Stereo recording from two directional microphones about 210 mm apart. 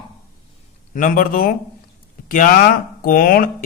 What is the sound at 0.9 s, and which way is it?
Speech, 40° left (ahead or behind).